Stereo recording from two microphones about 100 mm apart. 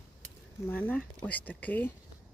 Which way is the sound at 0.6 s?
20° left (ahead or behind).